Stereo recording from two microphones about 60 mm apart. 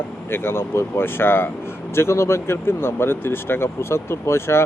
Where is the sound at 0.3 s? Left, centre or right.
Left.